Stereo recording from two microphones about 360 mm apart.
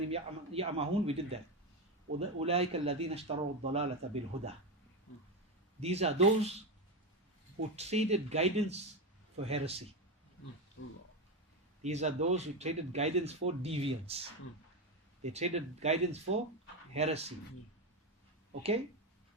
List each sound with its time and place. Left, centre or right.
0.1 s speech: centre
5.8 s speech: centre
7.8 s speech: centre
11.8 s speech: centre